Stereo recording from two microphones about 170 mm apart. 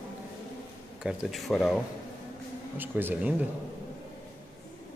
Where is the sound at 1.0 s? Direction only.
5° right (ahead or behind).